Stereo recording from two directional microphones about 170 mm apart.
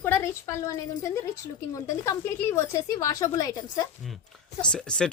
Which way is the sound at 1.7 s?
15° left (ahead or behind).